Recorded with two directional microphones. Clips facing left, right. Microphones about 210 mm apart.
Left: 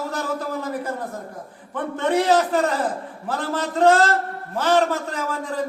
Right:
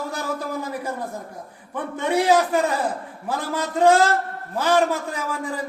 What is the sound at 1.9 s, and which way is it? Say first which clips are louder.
Speech: even; 10° right (ahead or behind).